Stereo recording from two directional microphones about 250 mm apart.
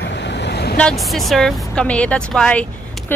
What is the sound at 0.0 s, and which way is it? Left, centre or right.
Vehicle, left.